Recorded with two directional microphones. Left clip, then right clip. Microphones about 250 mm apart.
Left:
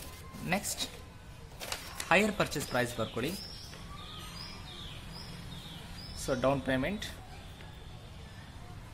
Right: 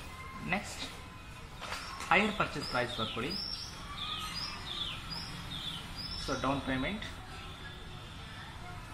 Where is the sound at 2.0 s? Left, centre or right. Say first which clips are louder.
Left 1 dB; left.